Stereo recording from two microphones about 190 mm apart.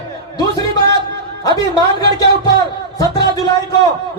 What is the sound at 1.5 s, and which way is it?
Speech, 20° left (ahead or behind).